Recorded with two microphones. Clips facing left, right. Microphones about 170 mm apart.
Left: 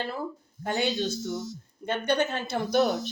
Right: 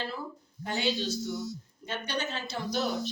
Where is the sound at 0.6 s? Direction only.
50° left (ahead or behind).